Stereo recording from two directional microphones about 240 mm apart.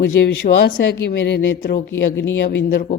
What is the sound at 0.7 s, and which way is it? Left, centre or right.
A man's voice, left.